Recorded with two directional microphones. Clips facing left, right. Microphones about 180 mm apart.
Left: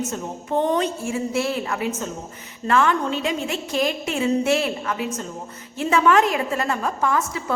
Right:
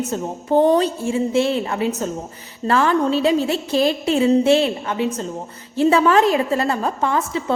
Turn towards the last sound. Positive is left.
turn(degrees=-30)  # may be behind; listen again after turning